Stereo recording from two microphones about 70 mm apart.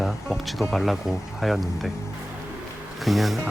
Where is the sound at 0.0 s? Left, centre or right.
Centre.